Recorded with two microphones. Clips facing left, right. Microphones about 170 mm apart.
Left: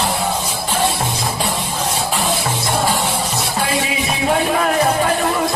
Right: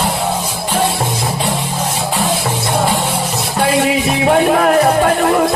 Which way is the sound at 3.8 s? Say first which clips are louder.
Right 6 dB; 60° right (ahead or behind).